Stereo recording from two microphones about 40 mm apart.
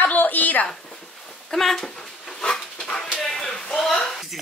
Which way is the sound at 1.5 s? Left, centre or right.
Centre.